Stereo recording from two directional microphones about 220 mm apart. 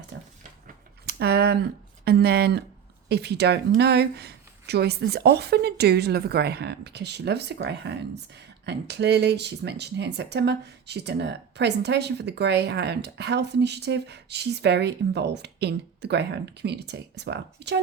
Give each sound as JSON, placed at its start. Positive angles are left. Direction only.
{"t": 1.0, "sound": "speech", "side_deg": -45}